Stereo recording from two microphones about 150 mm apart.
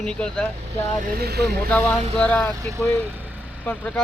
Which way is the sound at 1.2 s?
90° right.